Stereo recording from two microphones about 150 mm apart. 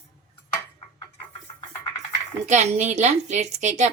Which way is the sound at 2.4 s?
50° right (ahead or behind).